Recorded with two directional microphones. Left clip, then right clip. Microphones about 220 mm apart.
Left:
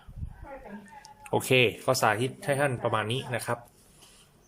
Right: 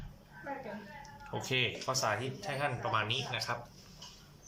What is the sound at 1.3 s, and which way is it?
Speech, 50° left (ahead or behind).